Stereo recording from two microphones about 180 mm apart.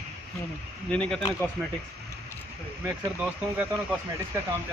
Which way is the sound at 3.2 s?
5° right (ahead or behind).